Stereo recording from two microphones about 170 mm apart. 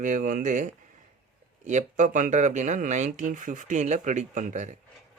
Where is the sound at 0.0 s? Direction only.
50° right (ahead or behind).